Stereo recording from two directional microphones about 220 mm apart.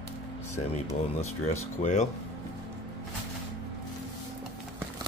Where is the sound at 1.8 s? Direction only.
30° left (ahead or behind).